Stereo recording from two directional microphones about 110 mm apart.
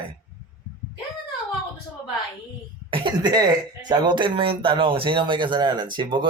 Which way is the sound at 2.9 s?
45° right (ahead or behind).